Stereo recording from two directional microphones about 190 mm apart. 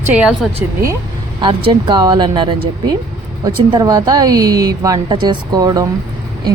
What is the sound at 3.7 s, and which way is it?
A woman's voice, 20° right (ahead or behind).